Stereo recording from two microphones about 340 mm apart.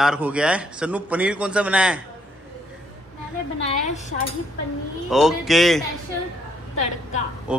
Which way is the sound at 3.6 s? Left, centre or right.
Left.